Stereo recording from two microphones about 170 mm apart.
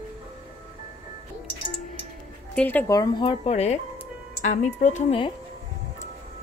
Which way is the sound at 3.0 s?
25° left (ahead or behind).